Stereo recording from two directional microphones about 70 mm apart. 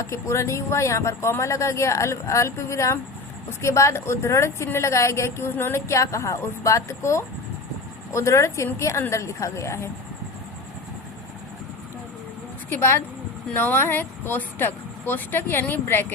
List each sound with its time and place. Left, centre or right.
0.0 s speech: left
5.9 s speech: left
12.7 s speech: left